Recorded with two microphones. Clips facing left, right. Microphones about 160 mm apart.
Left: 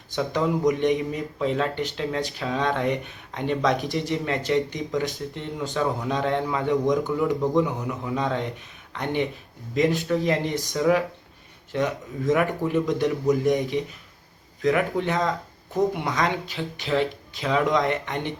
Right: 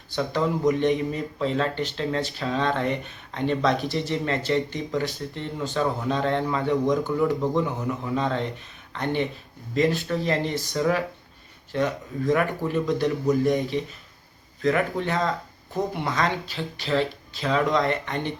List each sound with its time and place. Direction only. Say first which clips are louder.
0.2 s speech: left 1 dB; 15° left (ahead or behind)